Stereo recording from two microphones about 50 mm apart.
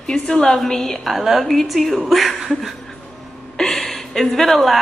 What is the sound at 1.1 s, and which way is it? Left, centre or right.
Speech, centre.